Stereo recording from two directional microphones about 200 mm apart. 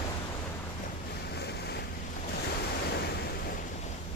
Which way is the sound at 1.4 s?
55° left (ahead or behind).